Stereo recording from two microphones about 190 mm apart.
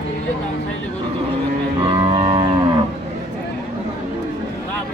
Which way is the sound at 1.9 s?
30° right (ahead or behind).